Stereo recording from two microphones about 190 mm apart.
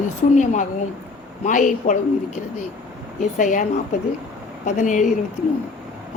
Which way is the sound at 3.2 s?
40° left (ahead or behind).